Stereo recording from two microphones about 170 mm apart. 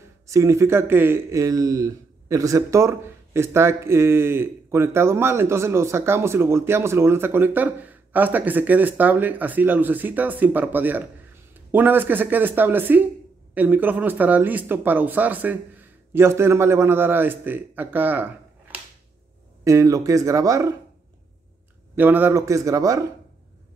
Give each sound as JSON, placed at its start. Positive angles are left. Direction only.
{"t": 0.3, "sound": "speech", "side_deg": -15}
{"t": 19.6, "sound": "speech", "side_deg": -20}
{"t": 21.9, "sound": "speech", "side_deg": -10}